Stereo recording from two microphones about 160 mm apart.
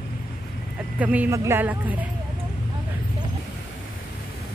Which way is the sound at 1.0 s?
10° right (ahead or behind).